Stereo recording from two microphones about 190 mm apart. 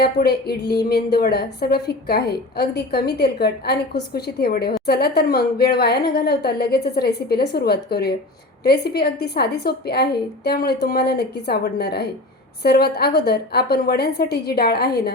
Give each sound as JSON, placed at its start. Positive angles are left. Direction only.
{"t": 0.0, "sound": "a woman's voice", "side_deg": 55}